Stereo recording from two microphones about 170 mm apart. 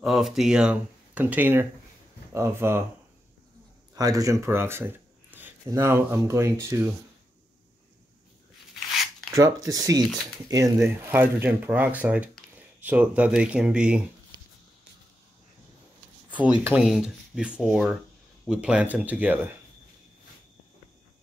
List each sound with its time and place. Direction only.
0.0 s speech: centre (ahead or behind)
3.9 s speech: 20° right (ahead or behind)
9.3 s speech: 20° right (ahead or behind)
16.3 s speech: 10° right (ahead or behind)